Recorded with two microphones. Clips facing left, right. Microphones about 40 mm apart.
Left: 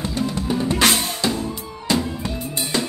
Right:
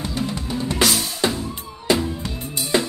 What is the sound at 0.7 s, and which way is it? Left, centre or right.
Drum kit, left.